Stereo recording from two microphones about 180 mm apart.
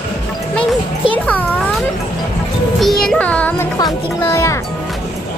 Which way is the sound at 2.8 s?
Centre (ahead or behind).